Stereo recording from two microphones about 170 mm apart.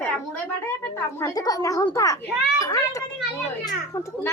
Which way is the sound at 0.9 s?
15° left (ahead or behind).